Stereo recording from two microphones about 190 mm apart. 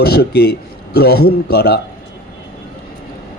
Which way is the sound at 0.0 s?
55° left (ahead or behind).